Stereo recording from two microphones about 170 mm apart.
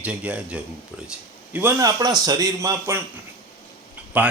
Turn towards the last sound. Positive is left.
turn(degrees=-10)  # may be behind; listen again after turning